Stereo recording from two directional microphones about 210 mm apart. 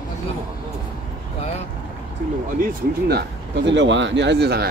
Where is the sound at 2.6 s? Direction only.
50° right (ahead or behind).